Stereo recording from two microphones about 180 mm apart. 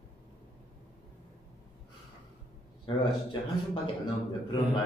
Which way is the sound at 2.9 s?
30° left (ahead or behind).